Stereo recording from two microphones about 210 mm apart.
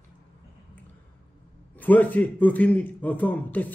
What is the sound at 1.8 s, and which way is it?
A man's voice, 10° left (ahead or behind).